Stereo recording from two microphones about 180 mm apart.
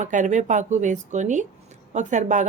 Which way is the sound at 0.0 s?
45° right (ahead or behind).